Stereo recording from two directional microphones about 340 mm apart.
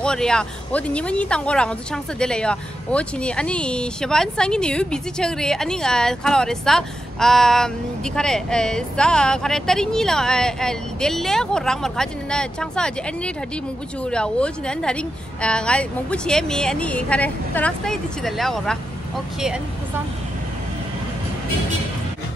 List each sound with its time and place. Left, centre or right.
0.0 s speech: centre